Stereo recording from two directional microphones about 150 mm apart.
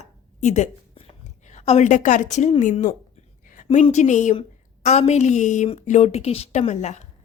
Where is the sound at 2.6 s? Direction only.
60° left (ahead or behind).